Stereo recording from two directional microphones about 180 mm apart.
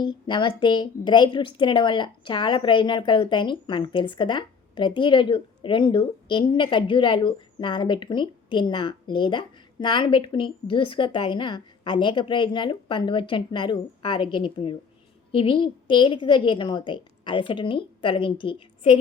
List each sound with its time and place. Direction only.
0.0 s a woman's voice: 25° left (ahead or behind)